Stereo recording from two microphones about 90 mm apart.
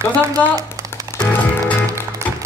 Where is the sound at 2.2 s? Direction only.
30° right (ahead or behind).